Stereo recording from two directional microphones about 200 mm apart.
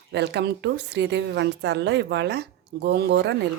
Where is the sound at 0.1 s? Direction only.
60° right (ahead or behind).